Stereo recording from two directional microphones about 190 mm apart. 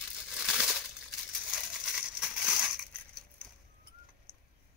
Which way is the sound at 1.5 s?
5° right (ahead or behind).